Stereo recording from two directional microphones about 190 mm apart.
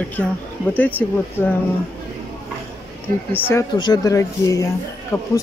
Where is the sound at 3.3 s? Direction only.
10° left (ahead or behind).